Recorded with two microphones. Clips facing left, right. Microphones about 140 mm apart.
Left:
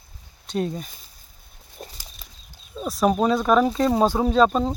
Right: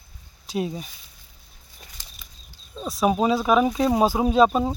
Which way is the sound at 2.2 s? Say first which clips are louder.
Left 2 dB; 40° left (ahead or behind).